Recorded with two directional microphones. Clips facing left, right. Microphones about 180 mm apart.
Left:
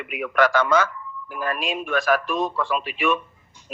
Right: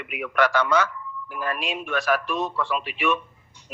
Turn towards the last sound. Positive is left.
turn(degrees=50)  # may be behind; listen again after turning